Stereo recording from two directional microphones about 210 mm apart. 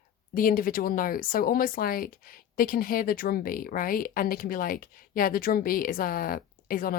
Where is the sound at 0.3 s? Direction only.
40° left (ahead or behind).